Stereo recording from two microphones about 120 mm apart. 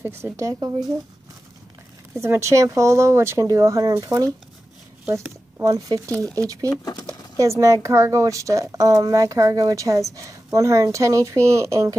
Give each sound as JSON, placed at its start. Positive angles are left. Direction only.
{"t": 0.0, "sound": "speech", "side_deg": -20}
{"t": 2.2, "sound": "speech", "side_deg": -20}
{"t": 5.6, "sound": "speech", "side_deg": -30}
{"t": 6.8, "sound": "speech", "side_deg": 35}
{"t": 7.1, "sound": "speech", "side_deg": -25}